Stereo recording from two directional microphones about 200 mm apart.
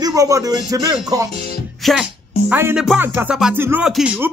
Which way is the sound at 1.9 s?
5° right (ahead or behind).